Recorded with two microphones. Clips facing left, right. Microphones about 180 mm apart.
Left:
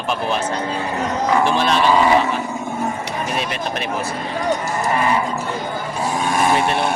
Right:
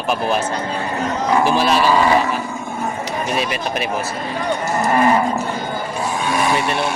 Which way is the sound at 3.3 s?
5° right (ahead or behind).